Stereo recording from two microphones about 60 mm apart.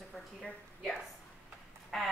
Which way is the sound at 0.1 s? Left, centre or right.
Centre.